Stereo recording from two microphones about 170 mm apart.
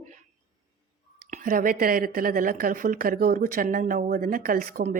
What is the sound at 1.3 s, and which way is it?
Speech, 55° right (ahead or behind).